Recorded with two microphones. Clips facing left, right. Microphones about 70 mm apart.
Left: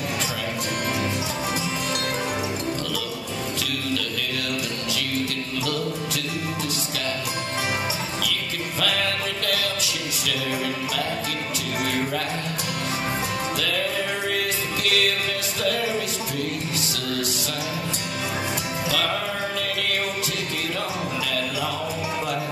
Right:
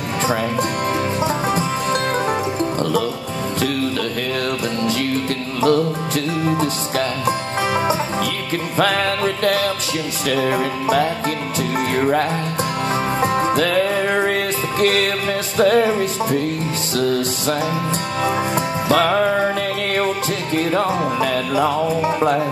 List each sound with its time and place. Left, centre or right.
5.6 s music: right
8.7 s music: right
12.0 s music: right
18.9 s music: right
20.5 s music: right